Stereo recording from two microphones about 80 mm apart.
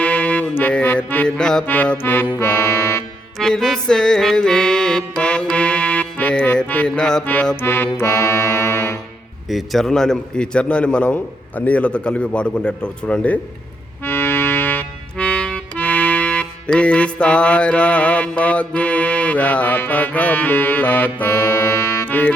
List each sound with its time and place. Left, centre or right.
0.0 s music: centre
1.6 s music: centre; by 3.0 s left
3.3 s music: centre
6.4 s a man's voice: centre
7.5 s music: left
7.9 s music: left
9.5 s a man's voice: centre
14.0 s music: left
15.2 s music: centre; by 22.1 s left